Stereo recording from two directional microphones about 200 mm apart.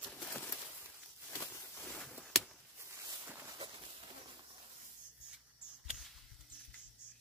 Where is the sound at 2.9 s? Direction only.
15° right (ahead or behind).